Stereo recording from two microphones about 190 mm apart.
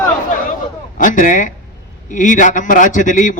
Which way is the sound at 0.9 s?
45° left (ahead or behind).